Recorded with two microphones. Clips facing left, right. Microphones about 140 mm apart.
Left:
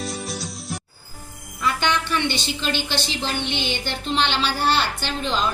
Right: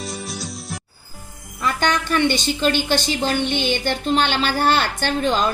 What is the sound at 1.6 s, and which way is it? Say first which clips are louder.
A woman's voice: right 2 dB; 45° right (ahead or behind).